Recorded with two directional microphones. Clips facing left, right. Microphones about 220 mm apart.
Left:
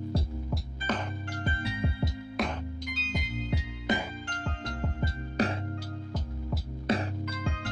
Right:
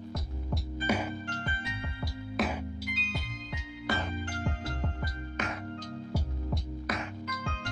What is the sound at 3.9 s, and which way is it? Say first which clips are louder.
Music: left 3 dB; 20° left (ahead or behind).